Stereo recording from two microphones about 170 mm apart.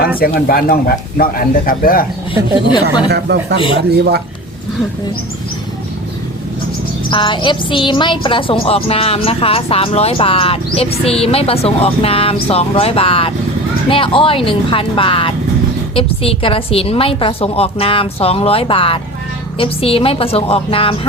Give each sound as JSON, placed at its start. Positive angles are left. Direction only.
{"t": 0.2, "sound": "speech", "side_deg": 60}
{"t": 2.8, "sound": "speech", "side_deg": -70}
{"t": 3.9, "sound": "speech", "side_deg": -70}
{"t": 7.1, "sound": "speech", "side_deg": 30}